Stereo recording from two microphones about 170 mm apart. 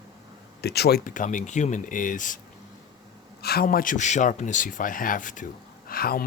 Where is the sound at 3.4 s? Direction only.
65° left (ahead or behind).